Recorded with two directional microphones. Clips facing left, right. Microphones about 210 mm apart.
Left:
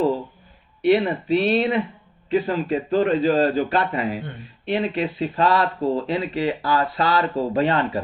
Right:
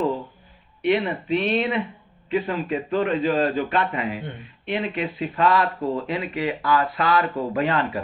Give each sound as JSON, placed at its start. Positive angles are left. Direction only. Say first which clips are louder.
{"t": 0.8, "sound": "speech", "louder": "left 4 dB", "side_deg": 35}